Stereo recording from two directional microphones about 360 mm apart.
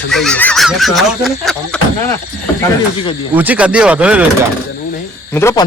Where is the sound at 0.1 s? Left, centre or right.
Centre.